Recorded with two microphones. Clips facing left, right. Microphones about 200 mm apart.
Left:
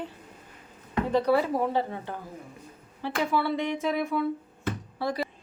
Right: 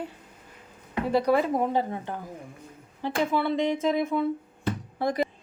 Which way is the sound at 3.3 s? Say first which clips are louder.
Right 1 dB; 20° right (ahead or behind).